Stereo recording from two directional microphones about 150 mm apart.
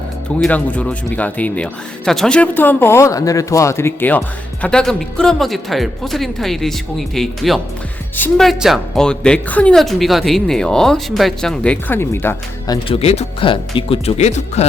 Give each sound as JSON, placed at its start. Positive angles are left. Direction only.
{"t": 0.3, "sound": "speech", "side_deg": 10}
{"t": 12.7, "sound": "speech", "side_deg": 40}